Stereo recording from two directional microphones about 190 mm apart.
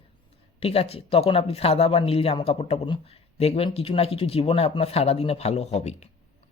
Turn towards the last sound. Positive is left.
turn(degrees=35)  # may be behind; listen again after turning